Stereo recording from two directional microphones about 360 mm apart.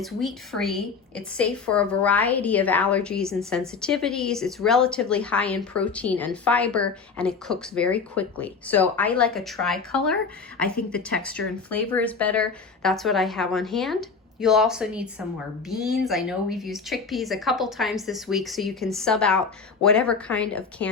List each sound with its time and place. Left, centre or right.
0.0 s a woman's voice: centre